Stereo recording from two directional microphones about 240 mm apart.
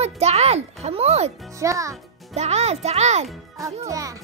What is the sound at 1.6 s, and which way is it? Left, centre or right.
Speech, centre.